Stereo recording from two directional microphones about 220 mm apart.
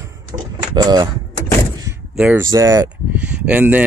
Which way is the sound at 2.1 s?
5° right (ahead or behind).